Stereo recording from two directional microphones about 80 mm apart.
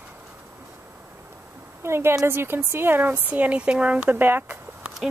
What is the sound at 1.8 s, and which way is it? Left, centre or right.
A woman's voice, right.